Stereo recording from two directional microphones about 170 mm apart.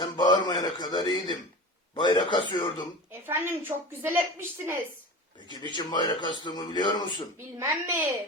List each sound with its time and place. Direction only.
0.0 s a sound: 25° left (ahead or behind)
2.0 s a man's voice: 25° left (ahead or behind)
3.1 s a woman's voice: 10° right (ahead or behind)
5.5 s a man's voice: 25° left (ahead or behind)
7.6 s a woman's voice: 15° right (ahead or behind)